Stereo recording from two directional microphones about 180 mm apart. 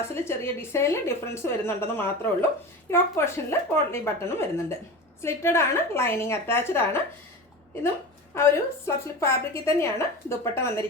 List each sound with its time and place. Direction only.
0.0 s a woman's voice: 15° left (ahead or behind)
8.3 s a woman's voice: 15° left (ahead or behind)